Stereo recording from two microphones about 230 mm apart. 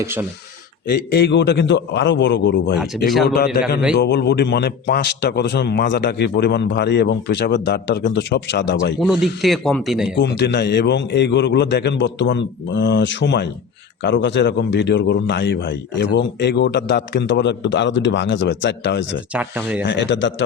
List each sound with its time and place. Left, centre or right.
0.0 s speech: centre
0.9 s a man's voice: left
9.0 s a man's voice: centre
10.2 s a man's voice: left
19.3 s a man's voice: centre
19.8 s a man's voice: left